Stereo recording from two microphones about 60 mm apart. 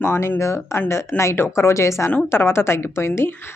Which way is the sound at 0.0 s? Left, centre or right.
Left.